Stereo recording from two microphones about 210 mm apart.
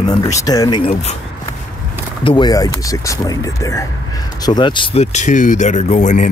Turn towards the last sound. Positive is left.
turn(degrees=35)  # may be behind; listen again after turning